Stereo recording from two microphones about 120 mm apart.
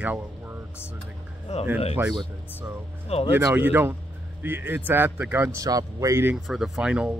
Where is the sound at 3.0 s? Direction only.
60° left (ahead or behind).